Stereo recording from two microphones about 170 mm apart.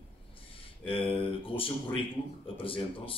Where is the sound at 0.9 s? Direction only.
30° left (ahead or behind).